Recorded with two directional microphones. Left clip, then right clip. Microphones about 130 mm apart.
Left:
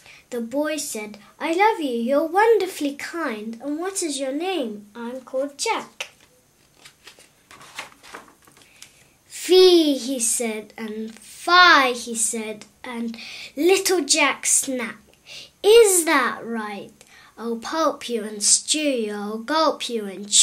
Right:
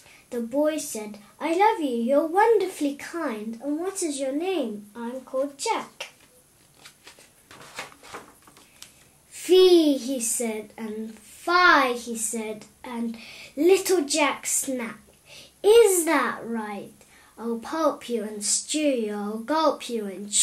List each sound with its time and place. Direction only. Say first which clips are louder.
0.3 s a woman's voice: even; 35° left (ahead or behind)
9.7 s a woman's voice: left 2 dB; 30° left (ahead or behind)